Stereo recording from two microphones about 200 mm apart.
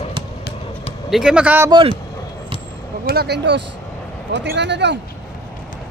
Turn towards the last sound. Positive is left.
turn(degrees=-60)  # may be behind; listen again after turning